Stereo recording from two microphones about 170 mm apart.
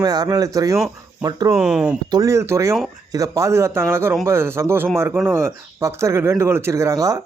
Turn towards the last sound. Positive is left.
turn(degrees=-20)  # may be behind; listen again after turning